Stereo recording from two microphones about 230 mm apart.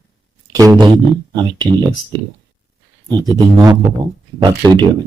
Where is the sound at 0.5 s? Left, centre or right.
Centre.